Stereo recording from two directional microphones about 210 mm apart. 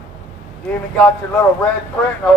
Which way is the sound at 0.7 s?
5° left (ahead or behind).